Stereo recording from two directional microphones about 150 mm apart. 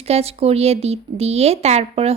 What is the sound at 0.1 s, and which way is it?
Speech, 45° right (ahead or behind).